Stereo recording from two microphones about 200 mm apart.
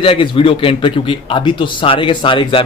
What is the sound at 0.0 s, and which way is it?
Speech, 25° left (ahead or behind).